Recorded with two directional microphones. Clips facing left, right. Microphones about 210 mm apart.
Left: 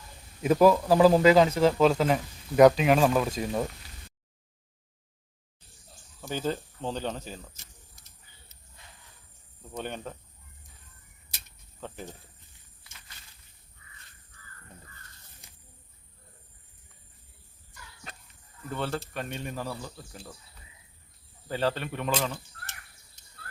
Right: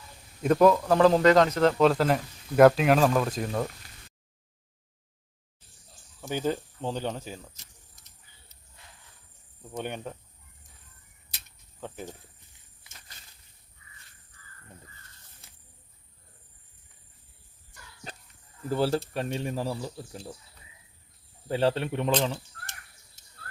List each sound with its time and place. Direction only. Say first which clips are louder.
0.4 s speech: even; 5° left (ahead or behind)
6.2 s speech: right 2 dB; 15° right (ahead or behind)
9.7 s speech: right 1 dB; 10° right (ahead or behind)
15.4 s a sound: even; 15° left (ahead or behind)
18.7 s speech: right 6 dB; 35° right (ahead or behind)
21.4 s speech: right 4 dB; 30° right (ahead or behind)